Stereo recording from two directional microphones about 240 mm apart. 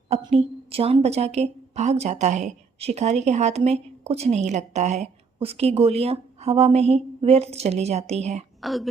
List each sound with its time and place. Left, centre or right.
0.3 s a woman's voice: right
8.6 s speech: centre